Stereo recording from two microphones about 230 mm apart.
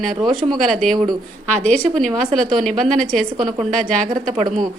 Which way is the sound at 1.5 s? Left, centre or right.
Right.